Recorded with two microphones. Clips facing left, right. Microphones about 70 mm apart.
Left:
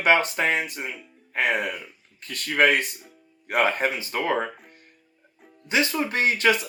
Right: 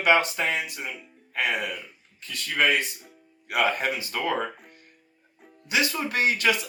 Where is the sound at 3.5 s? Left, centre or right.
Left.